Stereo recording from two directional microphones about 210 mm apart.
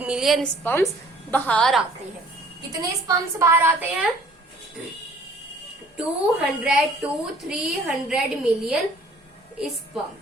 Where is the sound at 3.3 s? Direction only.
10° right (ahead or behind).